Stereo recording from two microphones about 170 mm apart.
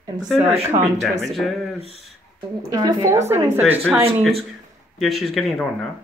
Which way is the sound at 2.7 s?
25° right (ahead or behind).